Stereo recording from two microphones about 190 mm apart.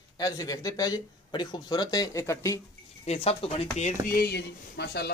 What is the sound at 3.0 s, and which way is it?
Speech, 30° left (ahead or behind).